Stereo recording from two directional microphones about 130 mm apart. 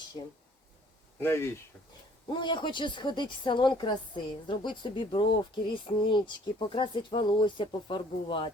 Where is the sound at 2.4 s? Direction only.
35° left (ahead or behind).